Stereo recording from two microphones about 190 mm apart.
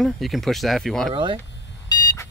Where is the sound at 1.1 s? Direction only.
25° right (ahead or behind).